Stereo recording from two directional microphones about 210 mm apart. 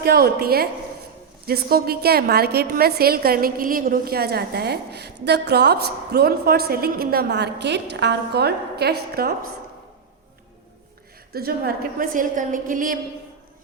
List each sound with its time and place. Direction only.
0.0 s a woman's voice: 45° right (ahead or behind)
11.3 s a woman's voice: 45° right (ahead or behind)